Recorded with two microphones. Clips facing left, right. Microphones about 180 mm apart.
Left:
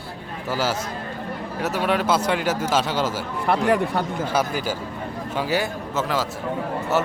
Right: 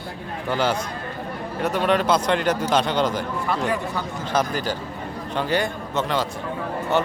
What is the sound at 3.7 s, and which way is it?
Speech, 65° left (ahead or behind).